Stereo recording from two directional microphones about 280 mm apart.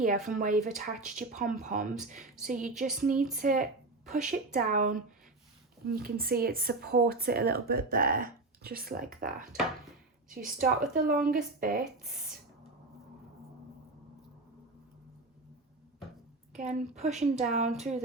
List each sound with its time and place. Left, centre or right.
0.0 s a woman's voice: right
16.6 s speech: right